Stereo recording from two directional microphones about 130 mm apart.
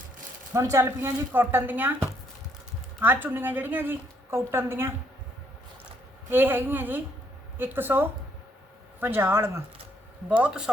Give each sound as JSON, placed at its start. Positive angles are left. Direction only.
{"t": 0.5, "sound": "a woman's voice", "side_deg": -25}
{"t": 6.3, "sound": "a woman's voice", "side_deg": -15}